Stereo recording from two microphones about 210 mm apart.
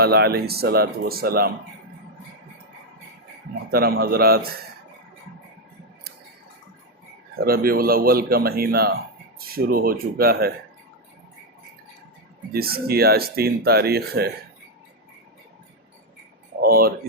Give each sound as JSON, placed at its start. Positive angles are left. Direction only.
{"t": 0.0, "sound": "speech", "side_deg": -50}
{"t": 3.7, "sound": "speech", "side_deg": -45}
{"t": 7.3, "sound": "speech", "side_deg": -45}
{"t": 12.5, "sound": "speech", "side_deg": -45}
{"t": 16.6, "sound": "a sound", "side_deg": -45}